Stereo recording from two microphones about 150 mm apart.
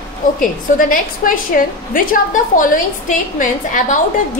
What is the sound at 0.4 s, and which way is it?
A woman's voice, 65° left (ahead or behind).